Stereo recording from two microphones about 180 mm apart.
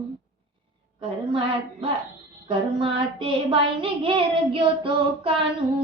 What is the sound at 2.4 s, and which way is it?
Child singing, 30° right (ahead or behind).